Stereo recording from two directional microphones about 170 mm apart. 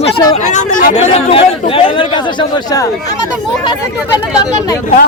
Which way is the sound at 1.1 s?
35° left (ahead or behind).